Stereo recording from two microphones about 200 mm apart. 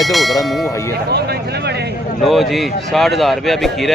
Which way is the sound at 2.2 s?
Centre (ahead or behind).